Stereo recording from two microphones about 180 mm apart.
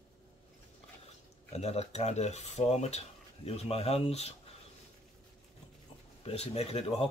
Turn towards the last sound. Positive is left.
turn(degrees=35)  # may be behind; listen again after turning